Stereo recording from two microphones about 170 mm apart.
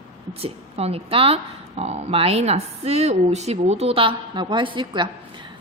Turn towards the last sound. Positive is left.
turn(degrees=-25)  # may be behind; listen again after turning